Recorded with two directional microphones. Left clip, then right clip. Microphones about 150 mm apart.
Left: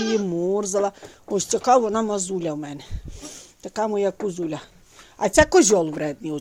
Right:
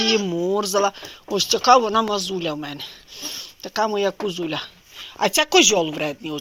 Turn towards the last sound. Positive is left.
turn(degrees=40)  # may be behind; listen again after turning